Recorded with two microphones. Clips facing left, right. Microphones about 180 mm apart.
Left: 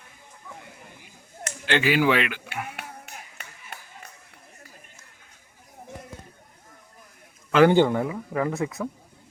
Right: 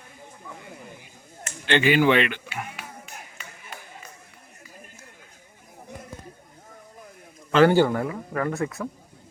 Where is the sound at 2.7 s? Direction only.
60° left (ahead or behind).